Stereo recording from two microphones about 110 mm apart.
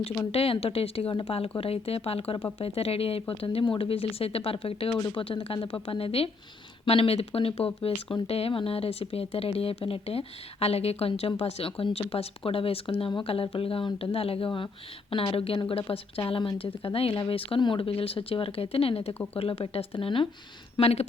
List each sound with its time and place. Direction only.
0.3 s speech: 60° left (ahead or behind)
20.7 s speech: 70° left (ahead or behind)